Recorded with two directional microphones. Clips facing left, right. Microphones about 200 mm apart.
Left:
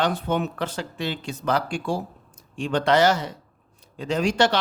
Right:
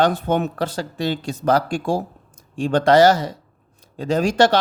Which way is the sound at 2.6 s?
40° right (ahead or behind).